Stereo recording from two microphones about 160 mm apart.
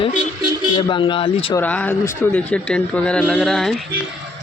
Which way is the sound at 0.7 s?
30° left (ahead or behind).